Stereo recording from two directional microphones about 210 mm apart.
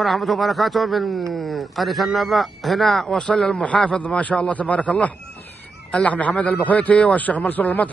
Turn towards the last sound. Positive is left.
turn(degrees=5)  # may be behind; listen again after turning